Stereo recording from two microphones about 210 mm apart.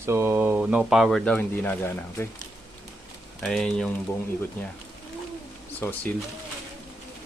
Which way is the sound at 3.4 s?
5° left (ahead or behind).